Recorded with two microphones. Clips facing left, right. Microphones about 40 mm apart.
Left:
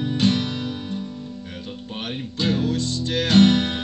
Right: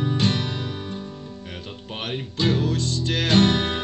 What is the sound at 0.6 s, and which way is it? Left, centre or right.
Music, centre.